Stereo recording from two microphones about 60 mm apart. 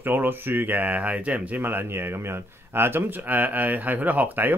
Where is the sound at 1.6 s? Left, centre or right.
Right.